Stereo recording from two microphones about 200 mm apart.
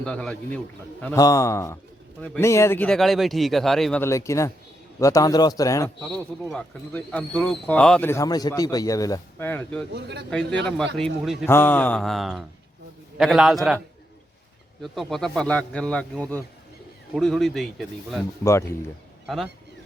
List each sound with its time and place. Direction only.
0.0 s a man's voice: 5° left (ahead or behind)
1.0 s a man's voice: 15° left (ahead or behind)
4.0 s speech: 15° left (ahead or behind)
6.0 s a man's voice: 5° left (ahead or behind)
9.9 s a man's voice: 55° right (ahead or behind)
10.9 s a man's voice: centre (ahead or behind)
11.4 s a man's voice: 10° left (ahead or behind)
14.8 s a man's voice: centre (ahead or behind)
18.4 s speech: 15° left (ahead or behind)